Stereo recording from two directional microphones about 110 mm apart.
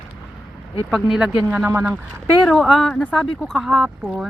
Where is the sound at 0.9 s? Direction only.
5° right (ahead or behind).